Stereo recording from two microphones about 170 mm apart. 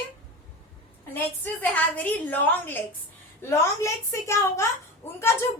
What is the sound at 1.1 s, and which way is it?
A woman's voice, 10° left (ahead or behind).